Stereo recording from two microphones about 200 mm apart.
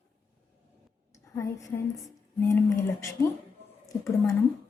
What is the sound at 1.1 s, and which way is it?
A woman's voice, 15° left (ahead or behind).